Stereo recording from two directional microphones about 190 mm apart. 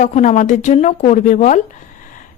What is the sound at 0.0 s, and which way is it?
A woman's voice, 40° left (ahead or behind).